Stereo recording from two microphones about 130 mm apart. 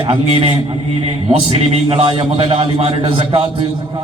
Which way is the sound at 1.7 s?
45° right (ahead or behind).